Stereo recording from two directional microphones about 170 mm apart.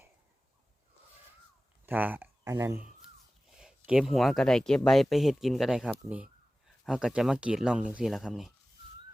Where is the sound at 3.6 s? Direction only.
5° right (ahead or behind).